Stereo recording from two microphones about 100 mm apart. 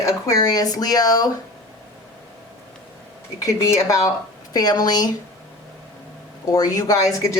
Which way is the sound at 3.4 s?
30° left (ahead or behind).